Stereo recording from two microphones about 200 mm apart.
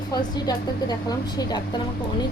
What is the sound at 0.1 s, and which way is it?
A woman's voice, 20° left (ahead or behind).